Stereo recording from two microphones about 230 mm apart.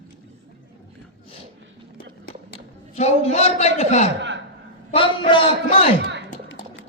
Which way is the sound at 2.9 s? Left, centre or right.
Left.